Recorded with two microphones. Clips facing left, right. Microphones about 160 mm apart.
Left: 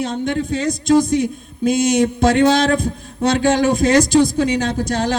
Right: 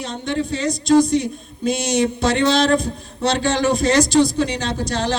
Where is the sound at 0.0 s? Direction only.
50° left (ahead or behind).